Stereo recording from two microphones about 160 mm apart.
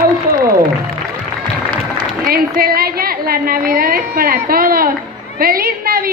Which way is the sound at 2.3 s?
65° right (ahead or behind).